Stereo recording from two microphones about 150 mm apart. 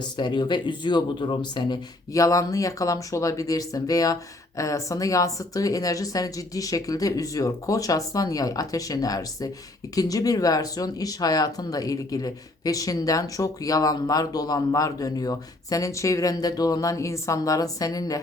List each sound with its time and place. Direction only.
0.0 s speech: 30° left (ahead or behind)